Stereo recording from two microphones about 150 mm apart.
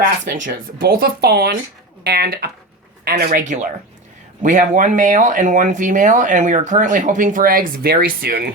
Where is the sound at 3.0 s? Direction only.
80° right.